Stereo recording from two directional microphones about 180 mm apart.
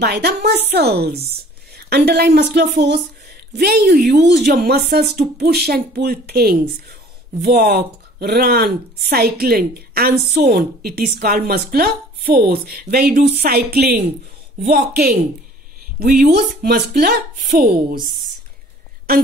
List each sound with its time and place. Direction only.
0.0 s speech: 65° right (ahead or behind)